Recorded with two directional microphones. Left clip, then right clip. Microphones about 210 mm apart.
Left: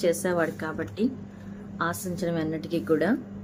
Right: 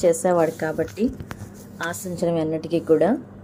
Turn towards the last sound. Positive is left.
turn(degrees=-5)  # may be behind; listen again after turning